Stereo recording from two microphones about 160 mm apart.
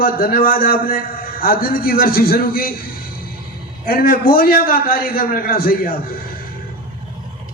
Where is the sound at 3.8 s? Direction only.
65° left (ahead or behind).